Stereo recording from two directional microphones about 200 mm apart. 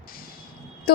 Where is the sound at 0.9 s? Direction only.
50° left (ahead or behind).